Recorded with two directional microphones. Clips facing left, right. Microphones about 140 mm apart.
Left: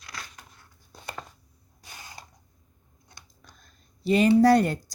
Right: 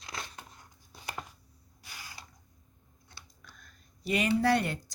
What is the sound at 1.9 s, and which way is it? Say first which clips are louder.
Mechanisms: left 3 dB; 25° left (ahead or behind).